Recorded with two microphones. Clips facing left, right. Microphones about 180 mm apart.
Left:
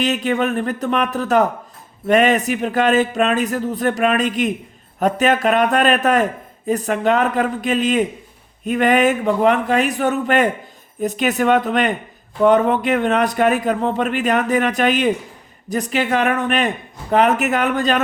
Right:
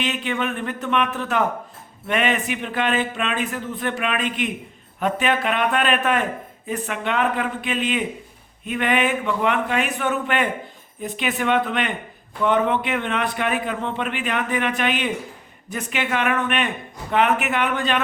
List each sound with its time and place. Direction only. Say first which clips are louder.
0.0 s a man's voice: left 6 dB; 40° left (ahead or behind)